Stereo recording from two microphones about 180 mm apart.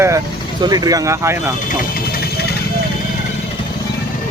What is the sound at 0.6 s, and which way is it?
Speech, 20° right (ahead or behind).